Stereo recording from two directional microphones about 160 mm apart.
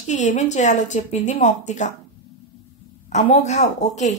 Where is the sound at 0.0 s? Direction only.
50° left (ahead or behind).